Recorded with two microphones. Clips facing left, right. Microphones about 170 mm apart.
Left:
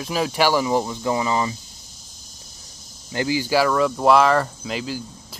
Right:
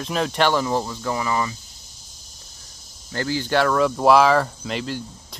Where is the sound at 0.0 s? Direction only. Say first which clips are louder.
Even; 5° left (ahead or behind); by 1.6 s 20° left (ahead or behind).